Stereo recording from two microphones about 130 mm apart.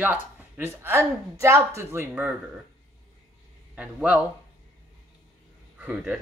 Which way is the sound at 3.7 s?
10° right (ahead or behind).